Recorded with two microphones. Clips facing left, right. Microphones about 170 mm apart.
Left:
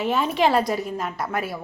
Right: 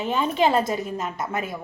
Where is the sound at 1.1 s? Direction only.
20° right (ahead or behind).